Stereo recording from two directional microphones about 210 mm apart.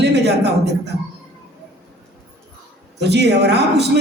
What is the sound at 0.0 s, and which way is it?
Speech, 55° right (ahead or behind).